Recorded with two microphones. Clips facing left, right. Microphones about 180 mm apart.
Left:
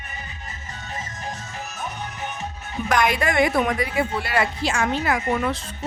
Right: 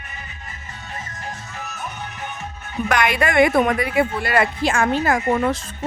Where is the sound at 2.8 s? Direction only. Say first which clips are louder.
Right 1 dB; 65° right (ahead or behind).